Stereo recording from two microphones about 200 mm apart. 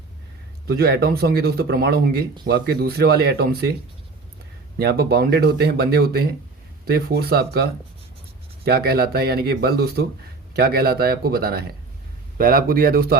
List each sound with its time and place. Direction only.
0.7 s speech: 50° right (ahead or behind)
4.8 s speech: 55° right (ahead or behind)